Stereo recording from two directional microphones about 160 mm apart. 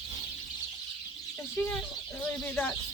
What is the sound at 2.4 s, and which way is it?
Bird, 10° left (ahead or behind).